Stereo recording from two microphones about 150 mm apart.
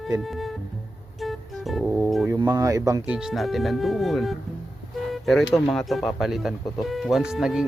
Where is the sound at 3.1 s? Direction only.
5° right (ahead or behind).